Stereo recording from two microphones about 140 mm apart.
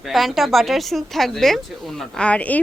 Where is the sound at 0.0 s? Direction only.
Centre (ahead or behind).